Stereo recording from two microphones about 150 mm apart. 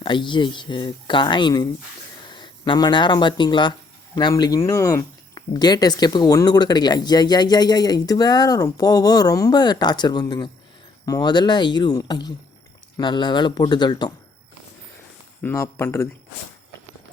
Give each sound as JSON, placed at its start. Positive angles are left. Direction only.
{"t": 0.0, "sound": "speech", "side_deg": 30}
{"t": 15.4, "sound": "speech", "side_deg": 20}